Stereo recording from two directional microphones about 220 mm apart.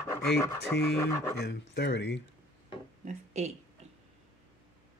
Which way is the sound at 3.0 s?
30° right (ahead or behind).